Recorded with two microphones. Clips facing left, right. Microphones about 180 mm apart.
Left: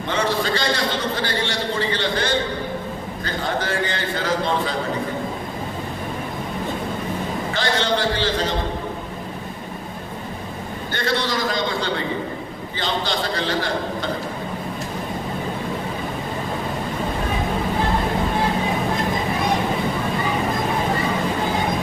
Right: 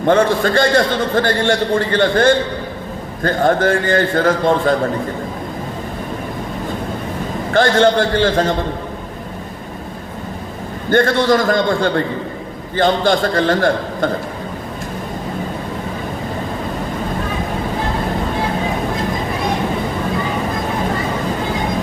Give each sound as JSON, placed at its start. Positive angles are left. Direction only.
{"t": 0.0, "sound": "a man's voice", "side_deg": -50}
{"t": 7.5, "sound": "a man's voice", "side_deg": -50}
{"t": 10.9, "sound": "a man's voice", "side_deg": -50}